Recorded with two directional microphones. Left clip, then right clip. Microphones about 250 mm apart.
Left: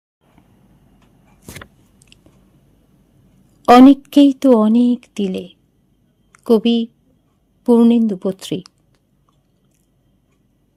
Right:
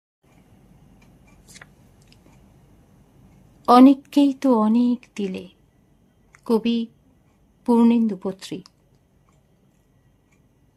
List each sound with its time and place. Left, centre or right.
2.1 s chewing: left
3.6 s a woman's voice: left